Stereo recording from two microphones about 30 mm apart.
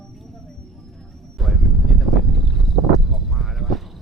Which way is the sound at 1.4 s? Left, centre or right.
Centre.